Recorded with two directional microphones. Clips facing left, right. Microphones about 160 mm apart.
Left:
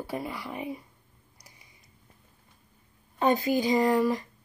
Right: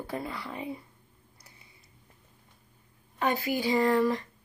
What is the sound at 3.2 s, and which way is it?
A woman's voice, 20° left (ahead or behind).